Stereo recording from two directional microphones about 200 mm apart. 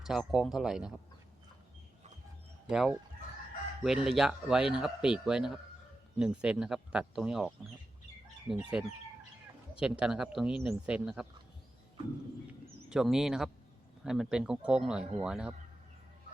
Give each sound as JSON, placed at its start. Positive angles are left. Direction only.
{"t": 0.0, "sound": "speech", "side_deg": 0}
{"t": 2.6, "sound": "speech", "side_deg": -5}
{"t": 12.9, "sound": "speech", "side_deg": 0}